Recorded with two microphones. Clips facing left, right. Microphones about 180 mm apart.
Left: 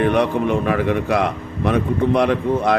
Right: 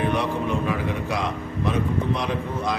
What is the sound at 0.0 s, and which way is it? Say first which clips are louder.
Speech: left 7 dB; 65° left (ahead or behind).